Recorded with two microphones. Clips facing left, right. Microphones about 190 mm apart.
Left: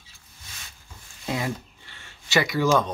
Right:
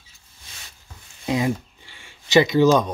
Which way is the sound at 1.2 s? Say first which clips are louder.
Right 6 dB; 20° right (ahead or behind).